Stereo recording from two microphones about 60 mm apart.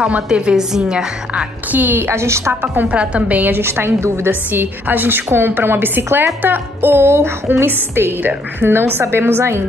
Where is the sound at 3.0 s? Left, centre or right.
Centre; by 4.4 s right.